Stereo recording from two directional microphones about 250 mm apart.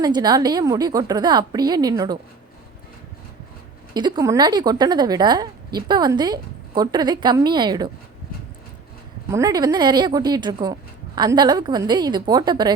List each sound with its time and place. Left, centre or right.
0.0 s a woman's voice: centre
3.9 s a woman's voice: centre
9.3 s a woman's voice: centre